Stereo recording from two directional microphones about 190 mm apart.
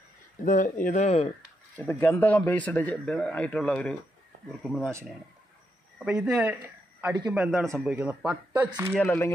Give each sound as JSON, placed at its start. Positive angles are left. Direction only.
{"t": 0.4, "sound": "speech", "side_deg": 45}
{"t": 1.9, "sound": "a man's voice", "side_deg": 10}
{"t": 5.9, "sound": "speech", "side_deg": -5}
{"t": 7.0, "sound": "a man's voice", "side_deg": -20}
{"t": 7.3, "sound": "speech", "side_deg": 0}
{"t": 8.9, "sound": "a man's voice", "side_deg": 10}